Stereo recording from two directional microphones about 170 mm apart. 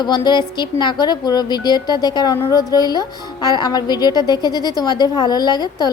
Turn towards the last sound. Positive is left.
turn(degrees=25)  # may be behind; listen again after turning